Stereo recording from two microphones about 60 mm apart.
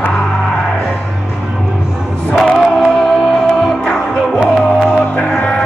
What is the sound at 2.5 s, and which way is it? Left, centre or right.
Music, centre.